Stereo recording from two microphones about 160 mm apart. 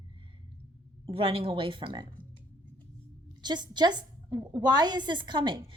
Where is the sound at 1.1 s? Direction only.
35° right (ahead or behind).